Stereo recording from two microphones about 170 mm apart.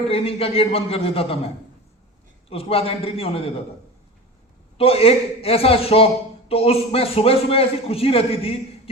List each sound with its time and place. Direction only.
0.1 s a man's voice: 35° left (ahead or behind)
2.5 s a man's voice: 35° left (ahead or behind)
4.8 s a man's voice: 35° left (ahead or behind)